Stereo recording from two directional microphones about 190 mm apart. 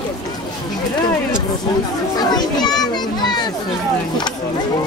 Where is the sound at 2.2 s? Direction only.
20° left (ahead or behind).